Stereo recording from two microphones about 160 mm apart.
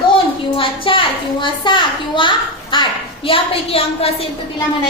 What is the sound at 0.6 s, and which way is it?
A child's voice, 35° left (ahead or behind).